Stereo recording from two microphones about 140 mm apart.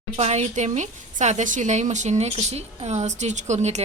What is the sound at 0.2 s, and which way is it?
A woman's voice, 50° right (ahead or behind).